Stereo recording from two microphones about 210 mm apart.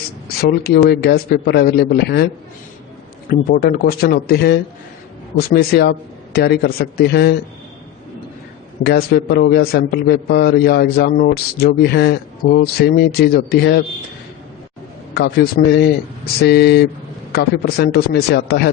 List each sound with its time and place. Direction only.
0.6 s a man's voice: 50° left (ahead or behind)
3.2 s a man's voice: 45° left (ahead or behind)
8.8 s a man's voice: 50° left (ahead or behind)
15.1 s a man's voice: 50° left (ahead or behind)